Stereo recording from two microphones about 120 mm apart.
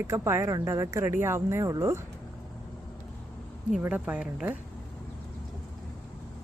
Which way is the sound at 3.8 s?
10° right (ahead or behind).